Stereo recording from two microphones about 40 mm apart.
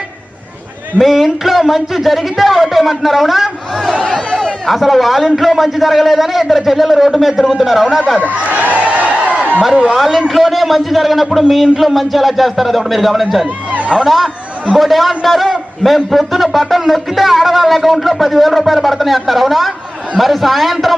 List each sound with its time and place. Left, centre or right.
1.0 s a man's voice: centre
4.0 s speech: centre
4.6 s a man's voice: centre
8.2 s a sound: right
9.9 s a man's voice: centre
13.7 s a sound: right
13.9 s a man's voice: centre